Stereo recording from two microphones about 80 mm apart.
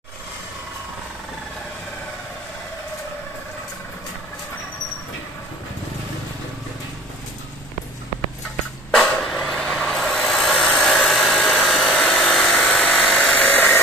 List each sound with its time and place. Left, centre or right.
9.0 s vehicle: centre
10.5 s hair dryer: centre
13.3 s dental drill: centre